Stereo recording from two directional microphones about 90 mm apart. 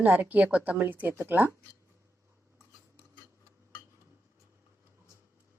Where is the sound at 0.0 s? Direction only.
20° right (ahead or behind).